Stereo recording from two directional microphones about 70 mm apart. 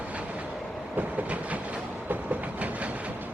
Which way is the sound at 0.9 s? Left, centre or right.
Right.